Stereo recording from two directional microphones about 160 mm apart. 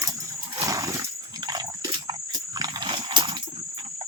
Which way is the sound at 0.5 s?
20° right (ahead or behind).